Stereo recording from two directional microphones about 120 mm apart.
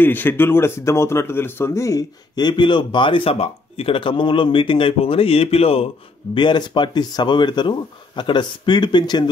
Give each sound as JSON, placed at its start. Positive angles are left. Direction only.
{"t": 0.0, "sound": "speech", "side_deg": 15}
{"t": 6.3, "sound": "speech", "side_deg": 40}